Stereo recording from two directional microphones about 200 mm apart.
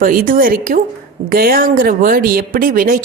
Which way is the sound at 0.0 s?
45° right (ahead or behind).